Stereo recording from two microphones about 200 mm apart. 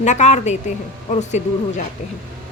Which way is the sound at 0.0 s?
35° left (ahead or behind).